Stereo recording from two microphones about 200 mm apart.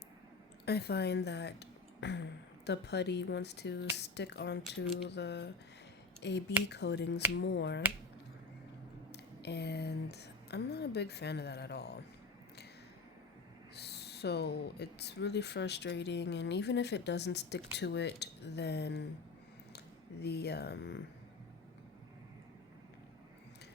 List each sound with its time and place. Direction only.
0.6 s speech: 55° left (ahead or behind)
9.1 s speech: 55° left (ahead or behind)
13.7 s speech: 55° left (ahead or behind)
20.2 s speech: 55° left (ahead or behind)